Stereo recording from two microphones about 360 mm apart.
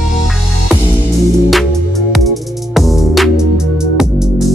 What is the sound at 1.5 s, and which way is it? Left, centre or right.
Music, centre.